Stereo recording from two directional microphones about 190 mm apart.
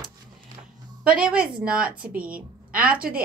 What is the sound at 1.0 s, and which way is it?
A woman's voice, 5° right (ahead or behind).